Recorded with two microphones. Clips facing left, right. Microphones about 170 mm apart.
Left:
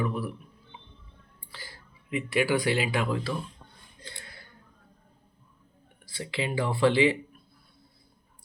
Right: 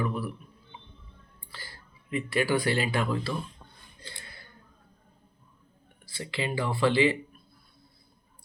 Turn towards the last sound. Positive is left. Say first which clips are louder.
# left 1 dB
turn(degrees=15)  # may be behind; listen again after turning